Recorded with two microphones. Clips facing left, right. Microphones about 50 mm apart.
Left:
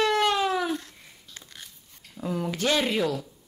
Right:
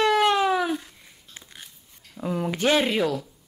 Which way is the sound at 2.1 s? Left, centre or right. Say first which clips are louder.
Right 2 dB; centre.